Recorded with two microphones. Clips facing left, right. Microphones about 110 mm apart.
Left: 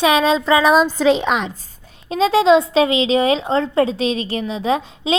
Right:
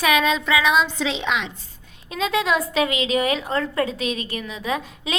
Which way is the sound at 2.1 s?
30° left (ahead or behind).